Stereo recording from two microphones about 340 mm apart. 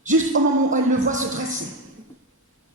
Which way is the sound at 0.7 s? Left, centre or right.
Right.